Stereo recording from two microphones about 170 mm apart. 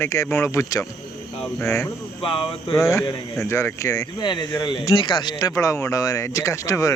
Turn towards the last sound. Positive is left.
turn(degrees=20)  # may be behind; listen again after turning